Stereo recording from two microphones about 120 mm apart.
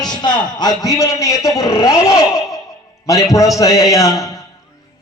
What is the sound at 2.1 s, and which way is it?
Speech, 5° right (ahead or behind).